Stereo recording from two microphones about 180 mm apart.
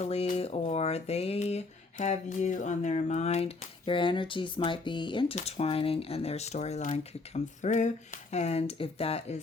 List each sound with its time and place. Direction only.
0.0 s speech: 35° left (ahead or behind)